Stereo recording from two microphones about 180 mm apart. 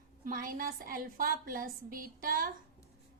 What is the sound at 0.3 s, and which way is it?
A woman's voice, 50° right (ahead or behind).